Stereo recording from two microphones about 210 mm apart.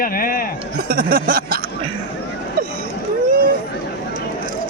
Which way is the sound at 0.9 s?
45° right (ahead or behind).